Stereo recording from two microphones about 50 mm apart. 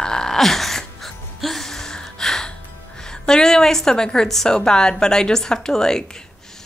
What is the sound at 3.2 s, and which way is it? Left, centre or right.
Speech, centre.